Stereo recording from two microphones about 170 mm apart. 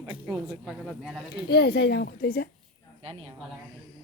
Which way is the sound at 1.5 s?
70° left (ahead or behind).